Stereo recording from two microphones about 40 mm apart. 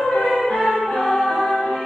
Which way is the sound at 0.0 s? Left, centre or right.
Left.